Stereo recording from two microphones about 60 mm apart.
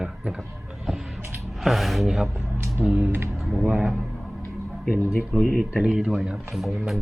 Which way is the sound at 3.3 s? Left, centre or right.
Centre.